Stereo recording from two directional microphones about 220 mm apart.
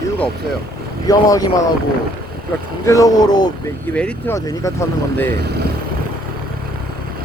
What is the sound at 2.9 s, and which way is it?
Speech, 15° left (ahead or behind).